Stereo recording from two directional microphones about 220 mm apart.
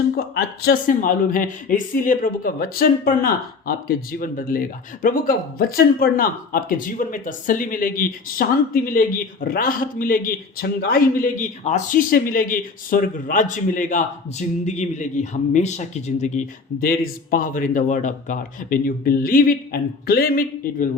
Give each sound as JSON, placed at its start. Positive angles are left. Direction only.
{"t": 0.3, "sound": "speech", "side_deg": 40}